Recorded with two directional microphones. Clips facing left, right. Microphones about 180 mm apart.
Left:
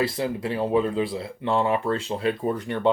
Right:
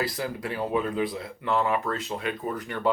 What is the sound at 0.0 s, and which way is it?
Speech, 25° left (ahead or behind).